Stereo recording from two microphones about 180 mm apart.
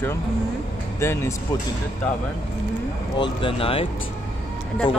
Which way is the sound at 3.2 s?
30° left (ahead or behind).